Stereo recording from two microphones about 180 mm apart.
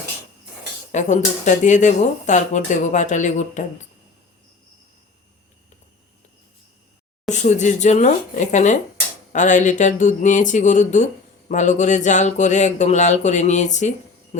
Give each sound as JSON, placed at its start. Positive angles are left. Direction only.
{"t": 0.9, "sound": "speech", "side_deg": 40}
{"t": 7.3, "sound": "speech", "side_deg": 40}